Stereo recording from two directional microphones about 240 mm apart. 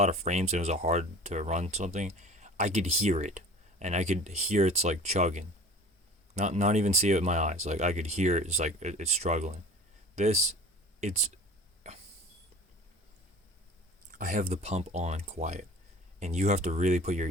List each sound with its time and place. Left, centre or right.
0.0 s speech: right
11.9 s a sound: right
14.2 s speech: right